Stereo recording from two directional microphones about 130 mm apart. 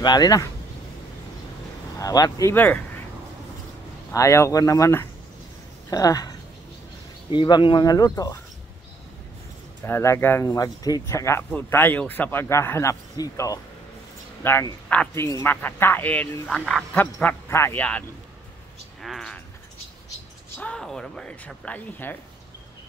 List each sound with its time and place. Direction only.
0.0 s speech: 30° left (ahead or behind)
2.0 s speech: 30° left (ahead or behind)
2.5 s speech: 15° left (ahead or behind)
4.1 s speech: 25° left (ahead or behind)
9.8 s speech: 20° left (ahead or behind)
18.9 s a sound: centre (ahead or behind)
20.5 s speech: 10° left (ahead or behind)